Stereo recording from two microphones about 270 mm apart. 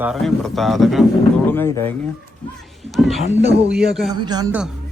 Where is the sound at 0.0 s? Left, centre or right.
Centre.